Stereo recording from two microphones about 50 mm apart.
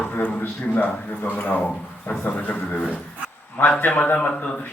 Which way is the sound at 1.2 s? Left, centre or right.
Left.